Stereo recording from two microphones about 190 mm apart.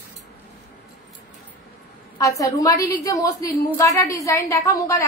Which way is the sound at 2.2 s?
15° left (ahead or behind).